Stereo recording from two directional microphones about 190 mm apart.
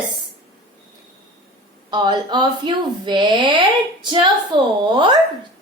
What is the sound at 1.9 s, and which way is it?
A woman's voice, 20° right (ahead or behind).